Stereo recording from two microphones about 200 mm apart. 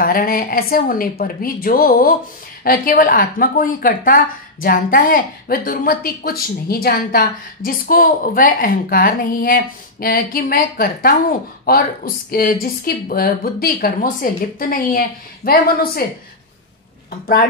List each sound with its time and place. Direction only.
0.0 s a woman's voice: 45° left (ahead or behind)